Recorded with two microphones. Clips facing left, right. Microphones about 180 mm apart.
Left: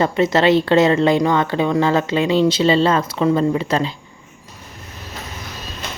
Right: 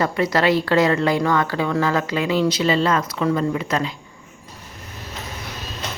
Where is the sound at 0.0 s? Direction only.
25° left (ahead or behind).